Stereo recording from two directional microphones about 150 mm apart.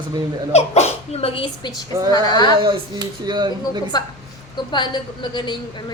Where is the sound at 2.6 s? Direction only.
30° right (ahead or behind).